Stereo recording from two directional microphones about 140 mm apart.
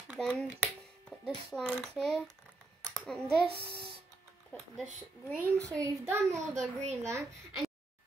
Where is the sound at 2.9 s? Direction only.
5° left (ahead or behind).